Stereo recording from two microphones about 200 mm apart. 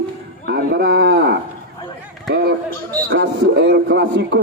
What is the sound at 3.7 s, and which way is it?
Speech, 55° right (ahead or behind).